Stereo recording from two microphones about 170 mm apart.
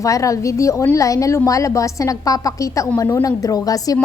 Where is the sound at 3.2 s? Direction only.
20° left (ahead or behind).